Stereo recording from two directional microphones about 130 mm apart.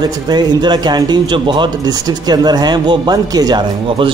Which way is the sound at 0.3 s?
35° right (ahead or behind).